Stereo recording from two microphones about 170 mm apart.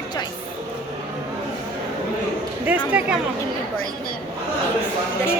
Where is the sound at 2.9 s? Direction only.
5° right (ahead or behind).